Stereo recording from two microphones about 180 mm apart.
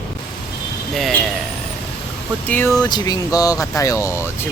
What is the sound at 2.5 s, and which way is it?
Speech, 10° left (ahead or behind).